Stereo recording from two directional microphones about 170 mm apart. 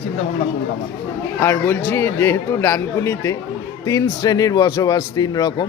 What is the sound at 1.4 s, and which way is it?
A man's voice, 15° left (ahead or behind).